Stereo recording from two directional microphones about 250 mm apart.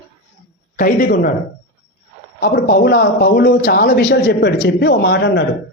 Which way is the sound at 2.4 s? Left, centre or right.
Left.